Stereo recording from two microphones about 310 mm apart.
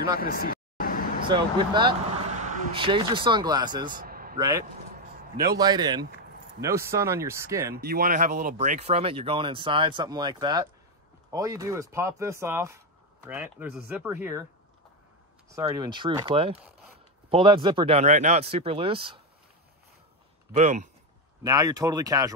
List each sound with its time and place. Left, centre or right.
0.2 s vehicle: left
1.3 s speech: centre
3.9 s a sound: right
4.4 s speech: centre
7.7 s speech: right; by 14.4 s centre
15.5 s speech: centre
20.5 s speech: right
21.4 s speech: centre